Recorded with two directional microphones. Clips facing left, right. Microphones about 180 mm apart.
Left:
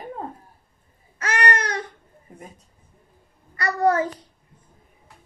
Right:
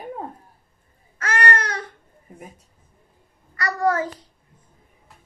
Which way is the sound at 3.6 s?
25° left (ahead or behind).